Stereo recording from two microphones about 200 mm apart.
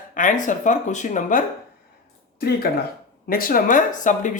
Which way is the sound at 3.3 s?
45° left (ahead or behind).